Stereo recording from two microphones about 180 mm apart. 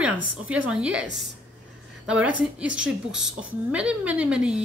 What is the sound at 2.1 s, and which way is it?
A woman's voice, 5° right (ahead or behind).